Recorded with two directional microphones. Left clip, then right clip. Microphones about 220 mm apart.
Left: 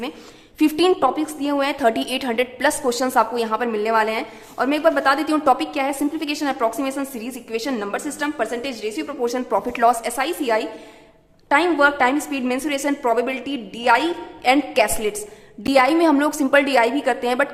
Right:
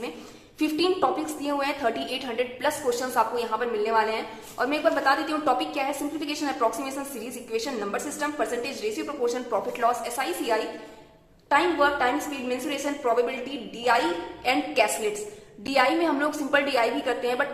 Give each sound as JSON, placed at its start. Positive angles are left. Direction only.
{"t": 0.6, "sound": "a woman's voice", "side_deg": 40}
{"t": 14.4, "sound": "a woman's voice", "side_deg": 40}